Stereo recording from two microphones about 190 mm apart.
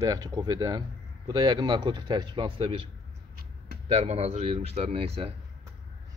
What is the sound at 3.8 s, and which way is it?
Speech, 35° right (ahead or behind).